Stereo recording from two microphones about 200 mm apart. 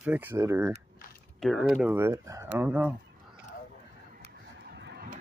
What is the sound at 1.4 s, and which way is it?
Speech, centre (ahead or behind).